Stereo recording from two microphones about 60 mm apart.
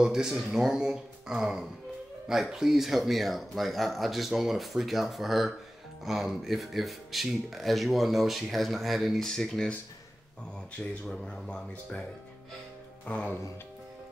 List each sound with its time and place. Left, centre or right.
0.0 s speech: centre
11.1 s speech: centre
13.0 s speech: centre